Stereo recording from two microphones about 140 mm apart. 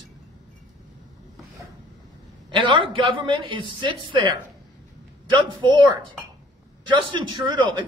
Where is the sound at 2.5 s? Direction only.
35° right (ahead or behind).